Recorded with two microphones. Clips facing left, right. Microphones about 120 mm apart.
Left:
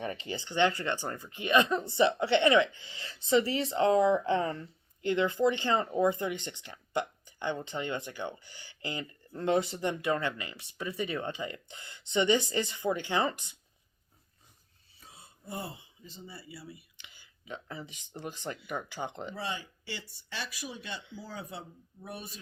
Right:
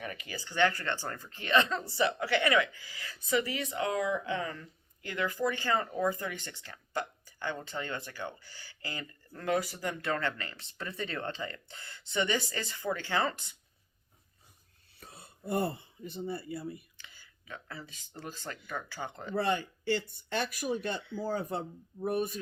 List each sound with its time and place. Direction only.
0.0 s speech: 30° left (ahead or behind)
14.9 s speech: 65° right (ahead or behind)
17.0 s speech: 20° left (ahead or behind)
19.3 s speech: 55° right (ahead or behind)